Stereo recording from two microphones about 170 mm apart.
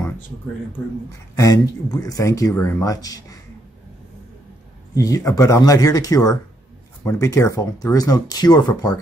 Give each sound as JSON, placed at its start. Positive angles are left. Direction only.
{"t": 1.3, "sound": "speech", "side_deg": 20}
{"t": 4.9, "sound": "speech", "side_deg": 20}